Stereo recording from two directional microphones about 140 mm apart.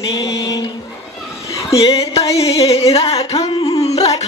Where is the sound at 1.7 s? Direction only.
45° left (ahead or behind).